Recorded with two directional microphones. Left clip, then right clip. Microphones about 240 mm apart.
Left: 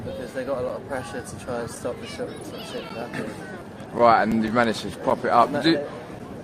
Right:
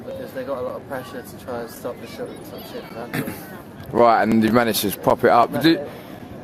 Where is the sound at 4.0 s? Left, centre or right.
Right.